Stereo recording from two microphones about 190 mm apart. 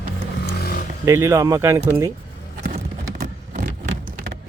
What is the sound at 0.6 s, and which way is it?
Vehicle, 50° left (ahead or behind).